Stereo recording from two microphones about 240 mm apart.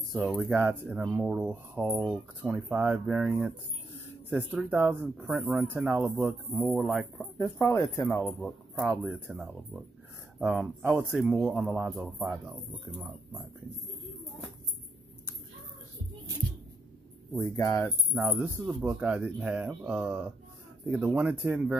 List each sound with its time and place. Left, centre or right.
0.1 s speech: centre
7.3 s speech: centre
17.3 s speech: centre
18.1 s speech: centre